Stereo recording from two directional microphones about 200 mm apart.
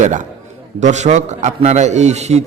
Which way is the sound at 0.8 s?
35° right (ahead or behind).